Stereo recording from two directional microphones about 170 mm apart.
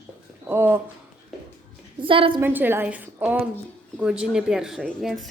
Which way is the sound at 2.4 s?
10° right (ahead or behind).